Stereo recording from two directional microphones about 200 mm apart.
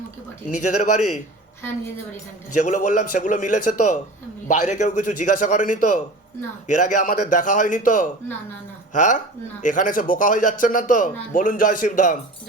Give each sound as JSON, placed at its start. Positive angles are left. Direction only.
{"t": 0.5, "sound": "speech", "side_deg": 35}
{"t": 2.6, "sound": "speech", "side_deg": 40}